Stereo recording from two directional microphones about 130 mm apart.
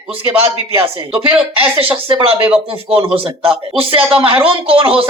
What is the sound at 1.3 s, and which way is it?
Speech, 45° right (ahead or behind).